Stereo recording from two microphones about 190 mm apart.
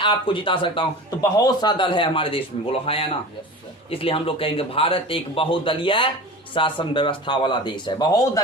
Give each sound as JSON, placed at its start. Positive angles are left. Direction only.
{"t": 0.0, "sound": "speech", "side_deg": 25}